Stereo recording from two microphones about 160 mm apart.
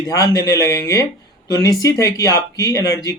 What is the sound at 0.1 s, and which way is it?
Speech, 20° left (ahead or behind).